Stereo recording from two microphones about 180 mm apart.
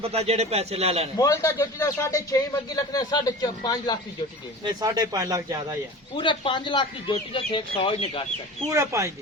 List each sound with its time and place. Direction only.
0.0 s speech: 35° right (ahead or behind)
1.1 s speech: 20° left (ahead or behind)
4.6 s speech: 20° right (ahead or behind)
6.1 s speech: 25° left (ahead or behind)
8.7 s speech: 15° right (ahead or behind)